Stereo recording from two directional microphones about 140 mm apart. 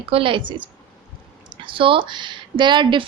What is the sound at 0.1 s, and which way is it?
Speech, 40° right (ahead or behind).